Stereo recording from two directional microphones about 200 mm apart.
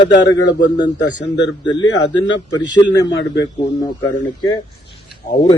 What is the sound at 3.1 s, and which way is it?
Speech, 60° left (ahead or behind).